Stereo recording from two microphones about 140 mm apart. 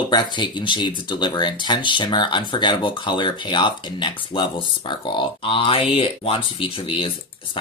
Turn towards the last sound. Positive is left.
turn(degrees=40)  # may be behind; listen again after turning